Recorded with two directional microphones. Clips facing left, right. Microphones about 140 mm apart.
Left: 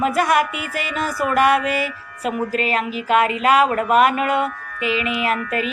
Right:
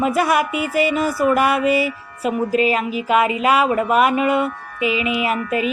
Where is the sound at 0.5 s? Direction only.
40° right (ahead or behind).